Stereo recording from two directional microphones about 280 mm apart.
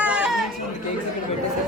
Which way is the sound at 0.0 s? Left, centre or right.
Centre.